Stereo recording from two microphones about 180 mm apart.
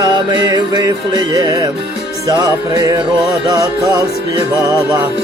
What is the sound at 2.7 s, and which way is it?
Music, 20° right (ahead or behind).